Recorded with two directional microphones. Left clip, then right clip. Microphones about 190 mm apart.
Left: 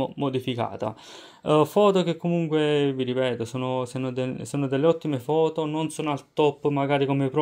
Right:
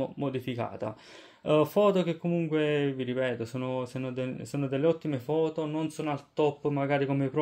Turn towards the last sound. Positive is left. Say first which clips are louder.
# left 5 dB
turn(degrees=35)  # may be behind; listen again after turning